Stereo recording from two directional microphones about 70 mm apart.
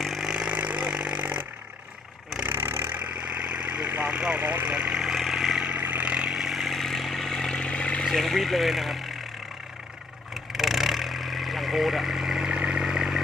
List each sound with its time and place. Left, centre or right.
0.0 s chainsaw: centre; by 1.5 s right
2.5 s vehicle: right
3.0 s vehicle: centre
5.6 s vehicle: right; by 9.0 s centre
10.3 s vehicle: centre